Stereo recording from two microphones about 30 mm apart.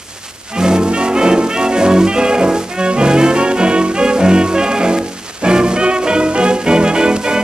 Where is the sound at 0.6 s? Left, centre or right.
Right.